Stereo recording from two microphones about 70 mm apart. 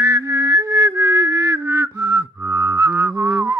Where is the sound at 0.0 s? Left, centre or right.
Right.